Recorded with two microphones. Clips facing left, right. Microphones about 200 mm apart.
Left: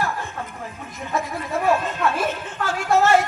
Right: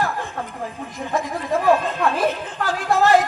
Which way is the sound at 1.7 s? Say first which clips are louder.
Right 2 dB; 35° right (ahead or behind).